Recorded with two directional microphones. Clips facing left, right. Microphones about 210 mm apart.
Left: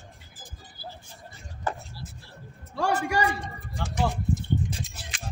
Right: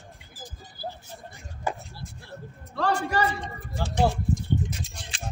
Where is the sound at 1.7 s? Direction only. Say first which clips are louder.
Right 1 dB; 10° right (ahead or behind).